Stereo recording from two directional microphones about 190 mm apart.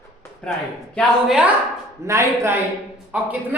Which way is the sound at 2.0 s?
15° right (ahead or behind).